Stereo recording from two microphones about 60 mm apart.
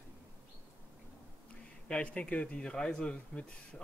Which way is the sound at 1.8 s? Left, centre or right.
Centre.